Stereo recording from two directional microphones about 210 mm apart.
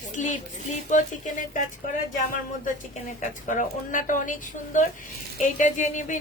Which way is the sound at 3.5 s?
40° left (ahead or behind).